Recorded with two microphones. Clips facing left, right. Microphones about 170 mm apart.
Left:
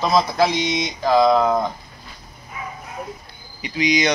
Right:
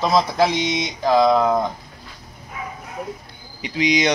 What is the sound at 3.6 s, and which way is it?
Speech, 25° right (ahead or behind).